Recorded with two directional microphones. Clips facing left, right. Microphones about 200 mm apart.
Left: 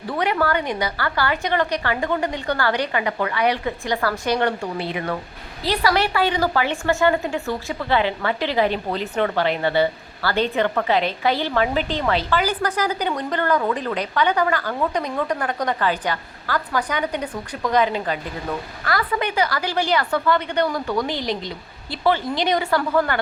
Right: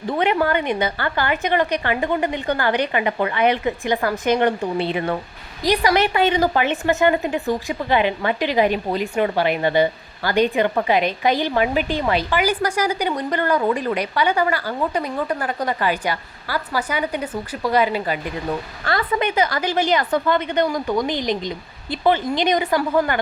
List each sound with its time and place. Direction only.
0.1 s a woman's voice: 20° right (ahead or behind)
18.9 s a woman's voice: 25° right (ahead or behind)